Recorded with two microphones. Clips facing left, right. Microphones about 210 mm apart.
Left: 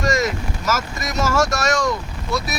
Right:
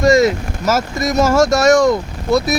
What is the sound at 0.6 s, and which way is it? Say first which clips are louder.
Speech: right 8 dB; 35° right (ahead or behind).